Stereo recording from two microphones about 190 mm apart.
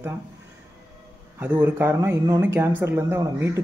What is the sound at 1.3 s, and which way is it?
Speech, 10° right (ahead or behind).